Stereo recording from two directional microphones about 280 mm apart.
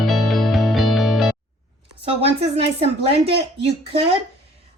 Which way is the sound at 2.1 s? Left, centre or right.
Right.